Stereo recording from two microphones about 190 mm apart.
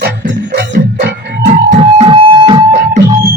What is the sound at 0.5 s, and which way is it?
Music, 60° right (ahead or behind).